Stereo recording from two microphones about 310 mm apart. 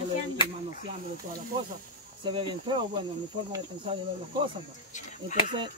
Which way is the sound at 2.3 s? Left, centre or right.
Centre.